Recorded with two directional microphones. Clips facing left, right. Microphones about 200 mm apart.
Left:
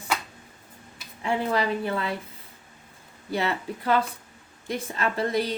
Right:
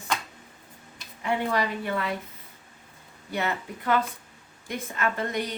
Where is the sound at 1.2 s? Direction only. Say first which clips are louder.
Left 1 dB; 30° left (ahead or behind).